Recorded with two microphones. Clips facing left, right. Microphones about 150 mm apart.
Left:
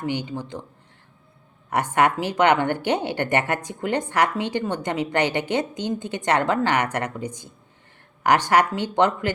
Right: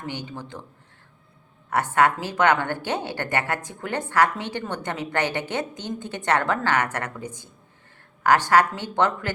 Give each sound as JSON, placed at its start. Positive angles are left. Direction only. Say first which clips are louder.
{"t": 0.0, "sound": "a woman's voice", "louder": "left 6 dB", "side_deg": 15}
{"t": 1.7, "sound": "a woman's voice", "louder": "even", "side_deg": 15}